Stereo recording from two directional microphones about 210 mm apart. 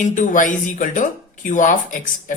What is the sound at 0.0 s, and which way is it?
Speech, 40° left (ahead or behind).